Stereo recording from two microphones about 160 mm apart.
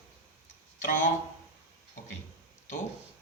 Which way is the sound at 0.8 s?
55° left (ahead or behind).